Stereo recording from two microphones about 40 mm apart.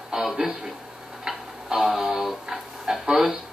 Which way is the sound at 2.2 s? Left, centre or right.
Centre.